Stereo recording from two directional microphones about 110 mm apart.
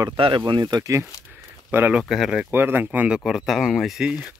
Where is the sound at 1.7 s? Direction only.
20° right (ahead or behind).